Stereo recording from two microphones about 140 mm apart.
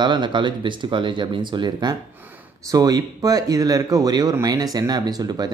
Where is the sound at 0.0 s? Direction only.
35° right (ahead or behind).